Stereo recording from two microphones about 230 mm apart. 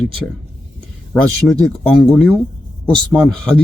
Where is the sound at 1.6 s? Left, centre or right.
Centre.